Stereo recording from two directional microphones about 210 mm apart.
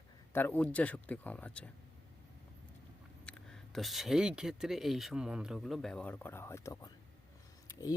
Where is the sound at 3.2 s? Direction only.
5° left (ahead or behind).